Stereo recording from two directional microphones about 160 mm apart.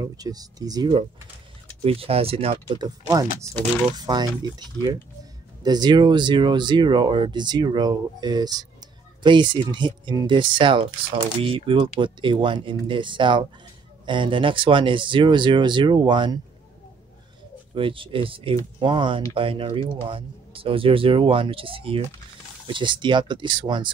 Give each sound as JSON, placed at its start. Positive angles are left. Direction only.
{"t": 0.0, "sound": "speech", "side_deg": -25}
{"t": 1.8, "sound": "speech", "side_deg": -35}
{"t": 17.7, "sound": "speech", "side_deg": -35}